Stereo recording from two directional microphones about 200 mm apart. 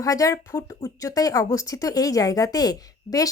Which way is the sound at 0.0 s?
15° left (ahead or behind).